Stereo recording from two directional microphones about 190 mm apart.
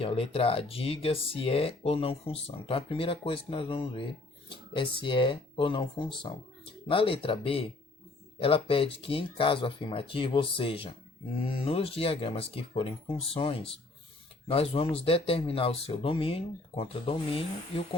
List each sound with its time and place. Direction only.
0.0 s speech: 30° left (ahead or behind)